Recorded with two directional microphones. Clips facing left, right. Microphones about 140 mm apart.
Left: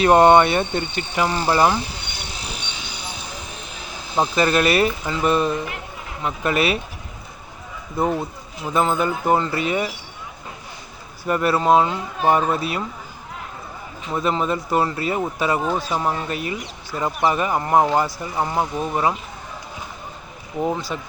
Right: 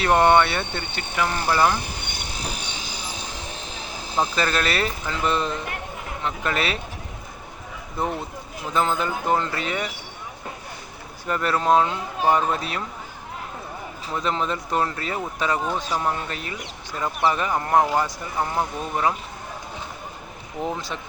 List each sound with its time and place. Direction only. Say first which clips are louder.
0.0 s speech: left 5 dB; 25° left (ahead or behind)
1.8 s insect: left 1 dB; 50° right (ahead or behind)
4.2 s speech: left 5 dB; 15° left (ahead or behind)
8.7 s speech: left 3 dB; 10° left (ahead or behind)
11.3 s speech: left 3 dB; 10° left (ahead or behind)
14.1 s speech: left 4 dB; 5° left (ahead or behind)
20.7 s speech: left 4 dB; centre (ahead or behind)